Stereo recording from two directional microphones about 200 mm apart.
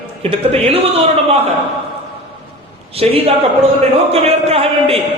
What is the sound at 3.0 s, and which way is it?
Speech, 30° right (ahead or behind).